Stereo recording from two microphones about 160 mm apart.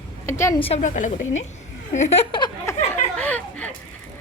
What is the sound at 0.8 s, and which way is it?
Speech, 50° left (ahead or behind).